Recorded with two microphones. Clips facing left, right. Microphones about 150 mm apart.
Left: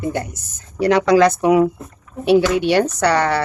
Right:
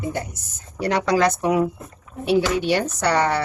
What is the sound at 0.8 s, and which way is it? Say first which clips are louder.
Speech: left 6 dB; 90° left.